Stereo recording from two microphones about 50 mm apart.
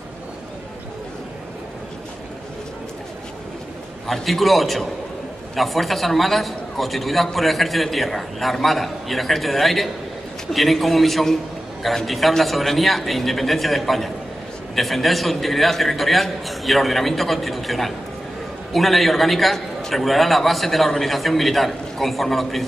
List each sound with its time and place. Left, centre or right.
4.1 s a man's voice: centre